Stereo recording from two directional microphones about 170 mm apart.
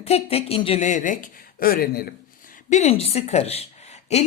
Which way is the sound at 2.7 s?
40° left (ahead or behind).